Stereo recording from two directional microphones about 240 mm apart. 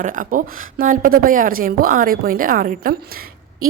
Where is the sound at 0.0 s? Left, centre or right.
Right.